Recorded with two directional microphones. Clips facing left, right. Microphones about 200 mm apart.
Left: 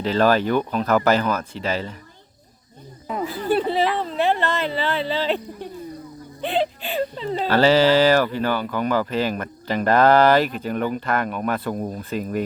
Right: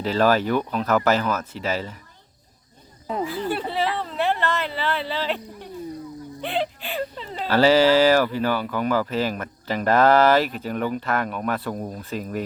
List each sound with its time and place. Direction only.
0.0 s speech: 5° right (ahead or behind)
3.5 s speech: 20° left (ahead or behind)
6.4 s speech: 20° left (ahead or behind)
7.4 s speech: 10° right (ahead or behind)